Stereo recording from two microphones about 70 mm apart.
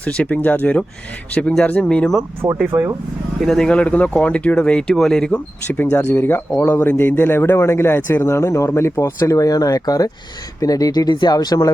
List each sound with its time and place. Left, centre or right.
0.0 s speech: centre
2.6 s speech: right
3.4 s speech: centre
3.7 s speech: centre
5.6 s speech: left
5.9 s a man's voice: left
6.1 s a man's voice: left